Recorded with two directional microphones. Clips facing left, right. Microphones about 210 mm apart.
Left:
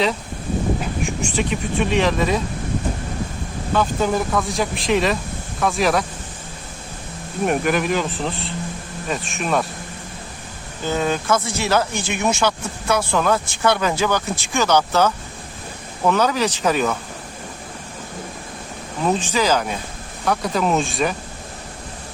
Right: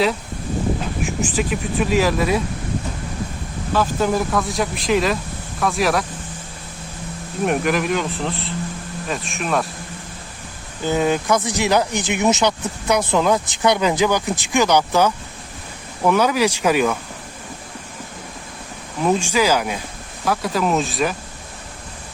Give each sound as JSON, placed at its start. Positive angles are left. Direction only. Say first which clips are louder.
{"t": 1.2, "sound": "speech", "louder": "right 2 dB", "side_deg": -5}
{"t": 3.8, "sound": "speech", "louder": "right 1 dB", "side_deg": 0}
{"t": 7.4, "sound": "speech", "louder": "even", "side_deg": 0}
{"t": 10.8, "sound": "speech", "louder": "right 2 dB", "side_deg": -15}
{"t": 19.0, "sound": "speech", "louder": "right 2 dB", "side_deg": -10}